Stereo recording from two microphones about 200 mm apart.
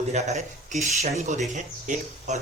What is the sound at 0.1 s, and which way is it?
Speech, 35° right (ahead or behind).